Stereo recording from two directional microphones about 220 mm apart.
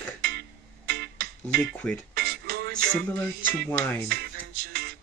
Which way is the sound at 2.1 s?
45° right (ahead or behind).